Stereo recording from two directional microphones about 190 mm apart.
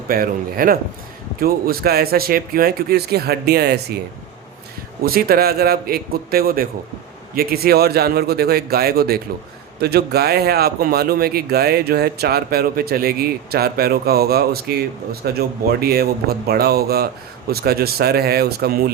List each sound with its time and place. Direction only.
0.1 s speech: 50° right (ahead or behind)
5.0 s speech: 50° right (ahead or behind)